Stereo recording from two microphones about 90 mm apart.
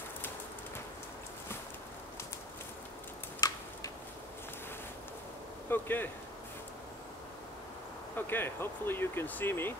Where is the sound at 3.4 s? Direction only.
45° left (ahead or behind).